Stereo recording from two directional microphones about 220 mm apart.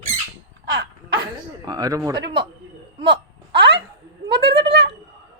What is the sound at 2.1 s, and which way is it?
Speech, 50° right (ahead or behind).